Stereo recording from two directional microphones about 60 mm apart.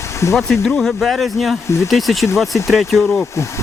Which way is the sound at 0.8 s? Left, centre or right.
Centre.